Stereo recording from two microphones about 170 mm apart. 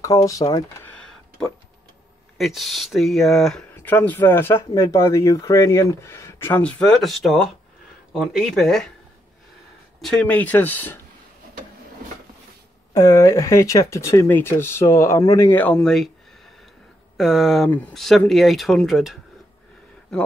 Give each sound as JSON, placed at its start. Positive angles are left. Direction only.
{"t": 0.0, "sound": "speech", "side_deg": 20}
{"t": 0.8, "sound": "a sound", "side_deg": 5}
{"t": 2.3, "sound": "speech", "side_deg": 0}
{"t": 10.0, "sound": "speech", "side_deg": 5}
{"t": 12.9, "sound": "speech", "side_deg": 15}
{"t": 17.2, "sound": "speech", "side_deg": 0}